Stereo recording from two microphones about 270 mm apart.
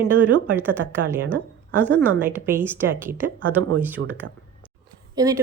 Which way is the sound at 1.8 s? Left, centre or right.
Centre.